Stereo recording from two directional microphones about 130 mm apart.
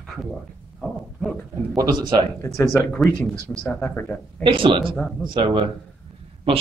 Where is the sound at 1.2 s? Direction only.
5° left (ahead or behind).